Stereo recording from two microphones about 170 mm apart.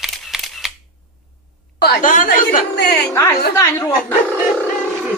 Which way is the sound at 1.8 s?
70° left (ahead or behind).